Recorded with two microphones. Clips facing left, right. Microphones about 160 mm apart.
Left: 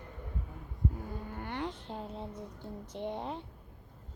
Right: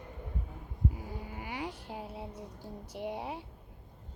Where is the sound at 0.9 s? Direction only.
10° right (ahead or behind).